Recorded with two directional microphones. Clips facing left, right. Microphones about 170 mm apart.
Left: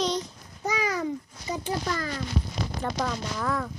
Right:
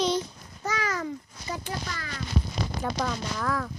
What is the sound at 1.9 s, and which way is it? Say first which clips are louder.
Speech: left 8 dB; 45° left (ahead or behind).